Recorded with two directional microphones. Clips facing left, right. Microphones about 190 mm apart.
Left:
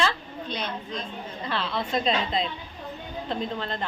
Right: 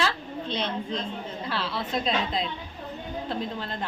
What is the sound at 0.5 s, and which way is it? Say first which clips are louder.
Speech: right 3 dB; 25° right (ahead or behind).